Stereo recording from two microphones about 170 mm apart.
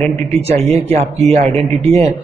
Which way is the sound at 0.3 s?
40° right (ahead or behind).